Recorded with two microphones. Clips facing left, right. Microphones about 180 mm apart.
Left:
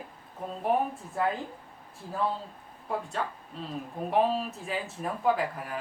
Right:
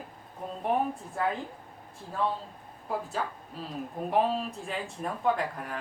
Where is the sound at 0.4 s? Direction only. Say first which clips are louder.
Left 1 dB; centre (ahead or behind).